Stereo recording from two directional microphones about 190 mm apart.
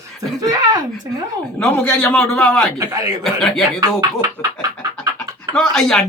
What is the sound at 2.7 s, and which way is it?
Speech, 20° right (ahead or behind).